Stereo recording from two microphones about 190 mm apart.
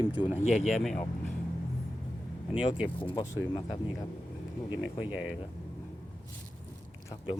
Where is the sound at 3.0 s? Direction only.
25° left (ahead or behind).